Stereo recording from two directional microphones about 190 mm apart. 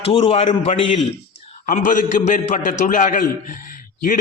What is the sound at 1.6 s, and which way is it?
A man's voice, 45° left (ahead or behind).